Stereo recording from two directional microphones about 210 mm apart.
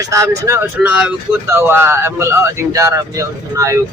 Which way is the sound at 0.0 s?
15° right (ahead or behind).